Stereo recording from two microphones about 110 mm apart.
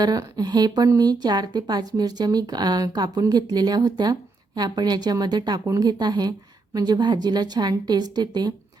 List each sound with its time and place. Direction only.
0.0 s speech: 35° right (ahead or behind)